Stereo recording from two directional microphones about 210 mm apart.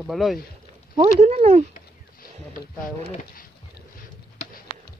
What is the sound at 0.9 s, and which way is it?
Speech, 30° right (ahead or behind).